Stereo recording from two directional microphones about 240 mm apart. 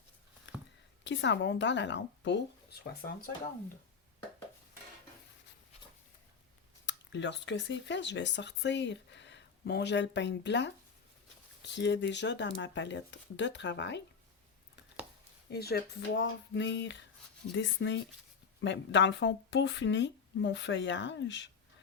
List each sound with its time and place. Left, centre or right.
1.0 s speech: left
6.8 s speech: left
15.5 s speech: left